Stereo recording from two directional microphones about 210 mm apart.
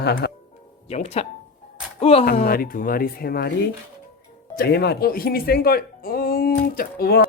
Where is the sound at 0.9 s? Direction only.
30° left (ahead or behind).